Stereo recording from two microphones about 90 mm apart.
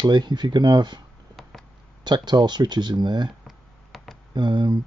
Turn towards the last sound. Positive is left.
turn(degrees=-60)  # may be behind; listen again after turning